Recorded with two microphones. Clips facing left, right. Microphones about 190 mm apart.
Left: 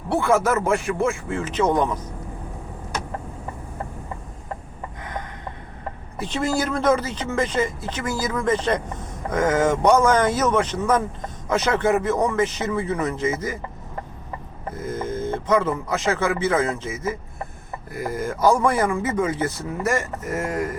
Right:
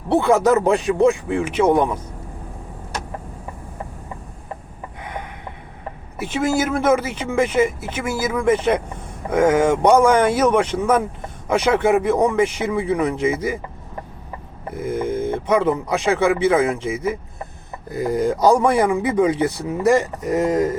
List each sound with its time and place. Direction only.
0.1 s speech: 20° right (ahead or behind)
6.3 s speech: 5° right (ahead or behind)
14.7 s speech: 10° right (ahead or behind)